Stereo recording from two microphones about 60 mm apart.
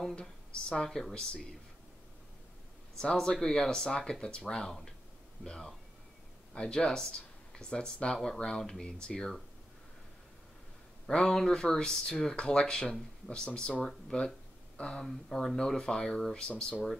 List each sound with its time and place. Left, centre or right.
0.0 s speech: centre
3.0 s speech: centre
11.1 s speech: centre
15.0 s speech: centre